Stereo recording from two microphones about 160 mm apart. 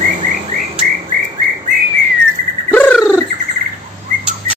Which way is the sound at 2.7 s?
10° left (ahead or behind).